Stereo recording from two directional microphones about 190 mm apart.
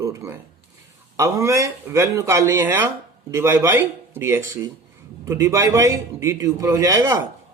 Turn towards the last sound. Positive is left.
turn(degrees=-15)  # may be behind; listen again after turning